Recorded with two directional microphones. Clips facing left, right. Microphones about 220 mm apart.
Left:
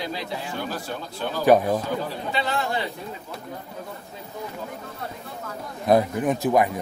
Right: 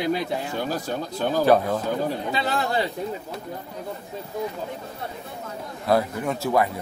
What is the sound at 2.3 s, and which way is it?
Speech, 40° right (ahead or behind).